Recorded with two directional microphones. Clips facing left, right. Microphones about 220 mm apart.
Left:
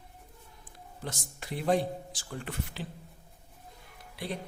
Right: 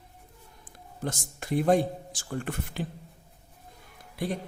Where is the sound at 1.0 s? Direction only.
50° right (ahead or behind).